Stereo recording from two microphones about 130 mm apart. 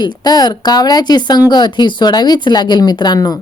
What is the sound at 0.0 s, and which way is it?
Speech, 35° left (ahead or behind).